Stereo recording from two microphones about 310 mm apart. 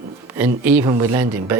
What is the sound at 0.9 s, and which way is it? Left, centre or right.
Speech, centre.